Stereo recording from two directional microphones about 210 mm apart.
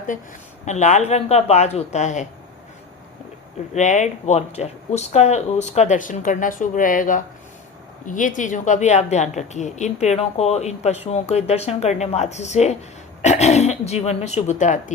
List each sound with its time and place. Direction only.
0.6 s a woman's voice: 35° left (ahead or behind)
3.8 s a woman's voice: 35° left (ahead or behind)